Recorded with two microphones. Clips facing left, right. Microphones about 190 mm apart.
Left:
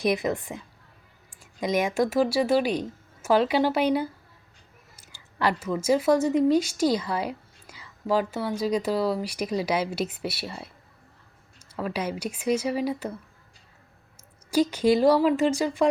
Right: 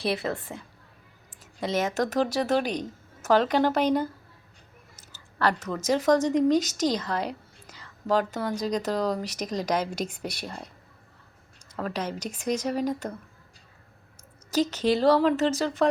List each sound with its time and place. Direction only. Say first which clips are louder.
0.0 s speech: left 3 dB; 15° left (ahead or behind)
1.6 s speech: left 2 dB; 15° left (ahead or behind)
14.5 s speech: left 3 dB; 10° left (ahead or behind)